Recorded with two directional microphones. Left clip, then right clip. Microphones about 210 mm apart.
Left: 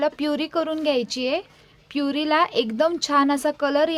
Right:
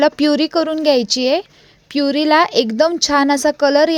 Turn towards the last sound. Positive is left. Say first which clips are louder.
# right 8 dB
turn(degrees=-25)  # may be behind; listen again after turning